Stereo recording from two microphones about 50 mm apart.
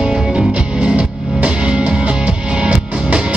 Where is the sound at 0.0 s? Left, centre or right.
Centre.